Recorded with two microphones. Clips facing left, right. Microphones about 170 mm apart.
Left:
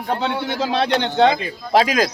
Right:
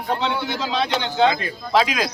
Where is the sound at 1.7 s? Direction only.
45° left (ahead or behind).